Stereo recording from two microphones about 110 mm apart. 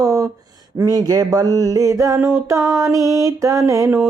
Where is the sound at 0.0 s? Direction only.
30° right (ahead or behind).